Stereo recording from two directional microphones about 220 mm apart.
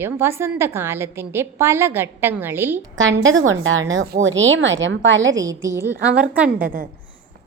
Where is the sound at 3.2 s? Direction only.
65° right (ahead or behind).